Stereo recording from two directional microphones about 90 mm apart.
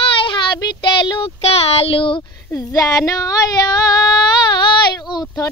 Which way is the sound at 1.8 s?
85° left.